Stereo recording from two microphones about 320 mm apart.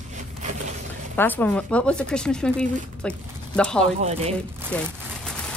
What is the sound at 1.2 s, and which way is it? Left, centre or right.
Speech, centre.